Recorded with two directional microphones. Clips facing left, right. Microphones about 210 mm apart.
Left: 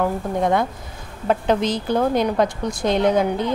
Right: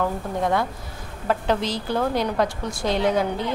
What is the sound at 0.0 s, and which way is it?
A woman's voice, 20° left (ahead or behind).